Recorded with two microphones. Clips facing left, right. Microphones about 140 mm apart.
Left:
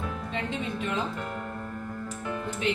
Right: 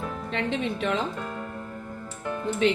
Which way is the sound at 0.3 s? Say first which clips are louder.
Right 5 dB; 90° right.